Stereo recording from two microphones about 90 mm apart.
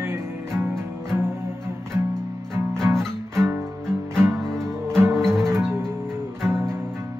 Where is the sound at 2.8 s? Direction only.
5° left (ahead or behind).